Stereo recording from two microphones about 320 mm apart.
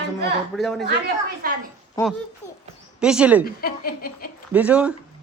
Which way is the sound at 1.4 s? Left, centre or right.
Right.